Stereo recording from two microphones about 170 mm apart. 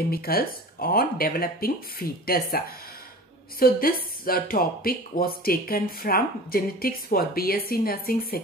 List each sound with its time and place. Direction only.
0.1 s a woman's voice: 60° left (ahead or behind)